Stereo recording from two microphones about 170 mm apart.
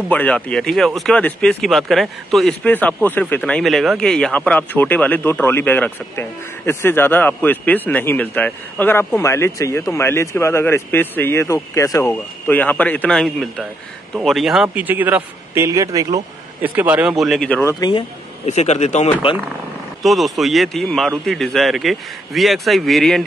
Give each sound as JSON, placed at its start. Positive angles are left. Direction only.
{"t": 0.1, "sound": "a man's voice", "side_deg": 10}
{"t": 16.6, "sound": "speech", "side_deg": -10}
{"t": 17.7, "sound": "speech", "side_deg": 25}
{"t": 18.4, "sound": "speech", "side_deg": 40}
{"t": 20.0, "sound": "speech", "side_deg": 0}